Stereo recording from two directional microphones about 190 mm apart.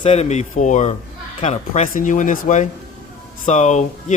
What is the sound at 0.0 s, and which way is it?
A man's voice, 35° left (ahead or behind).